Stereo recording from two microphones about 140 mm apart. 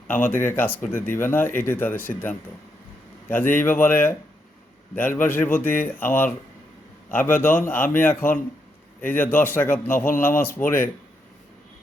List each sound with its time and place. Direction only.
0.1 s speech: 15° left (ahead or behind)
3.2 s speech: 15° left (ahead or behind)